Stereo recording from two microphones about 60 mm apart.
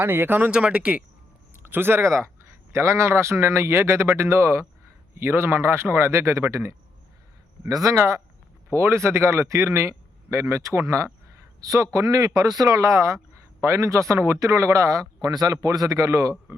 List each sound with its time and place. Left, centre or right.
0.0 s speech: right
0.5 s speech: centre
1.5 s speech: right
2.0 s a man's voice: right
7.7 s speech: right
7.9 s a man's voice: right
8.7 s a man's voice: right
11.6 s a man's voice: right